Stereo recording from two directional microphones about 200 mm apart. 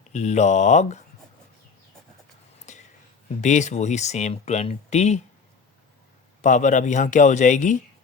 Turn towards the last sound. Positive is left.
turn(degrees=40)  # may be behind; listen again after turning